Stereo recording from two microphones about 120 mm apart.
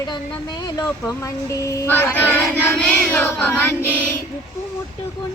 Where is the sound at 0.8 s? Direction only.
25° left (ahead or behind).